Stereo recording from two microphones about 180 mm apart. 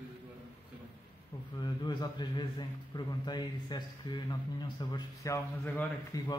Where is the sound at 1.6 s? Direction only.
25° left (ahead or behind).